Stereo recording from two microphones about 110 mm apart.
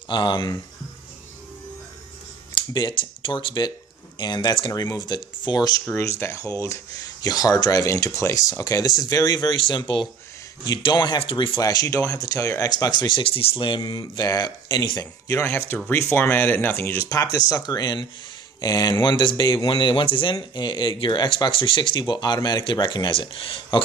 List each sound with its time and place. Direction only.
0.1 s speech: 45° left (ahead or behind)
2.5 s speech: 45° left (ahead or behind)
5.9 s speech: 25° left (ahead or behind)
15.4 s speech: 20° left (ahead or behind)
17.1 s speech: 35° left (ahead or behind); by 23.8 s 50° left (ahead or behind)